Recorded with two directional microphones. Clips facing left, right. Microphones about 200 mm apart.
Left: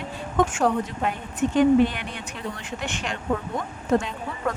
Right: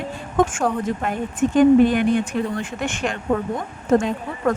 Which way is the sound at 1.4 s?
45° right (ahead or behind).